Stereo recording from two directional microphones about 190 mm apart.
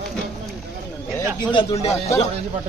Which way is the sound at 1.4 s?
25° left (ahead or behind).